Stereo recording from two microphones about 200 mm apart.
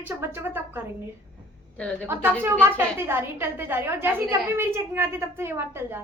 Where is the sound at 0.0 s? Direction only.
10° right (ahead or behind).